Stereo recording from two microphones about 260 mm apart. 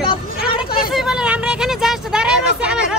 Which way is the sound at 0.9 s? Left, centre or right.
Centre.